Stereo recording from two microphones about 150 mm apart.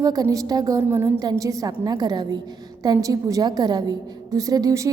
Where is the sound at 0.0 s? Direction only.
25° right (ahead or behind).